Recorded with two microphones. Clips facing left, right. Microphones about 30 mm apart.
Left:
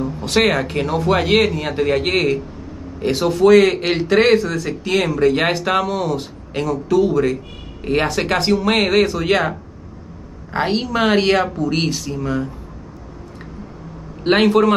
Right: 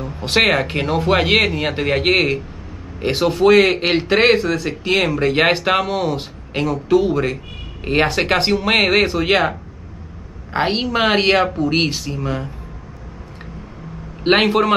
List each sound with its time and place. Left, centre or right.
0.2 s a man's voice: right
14.2 s a man's voice: right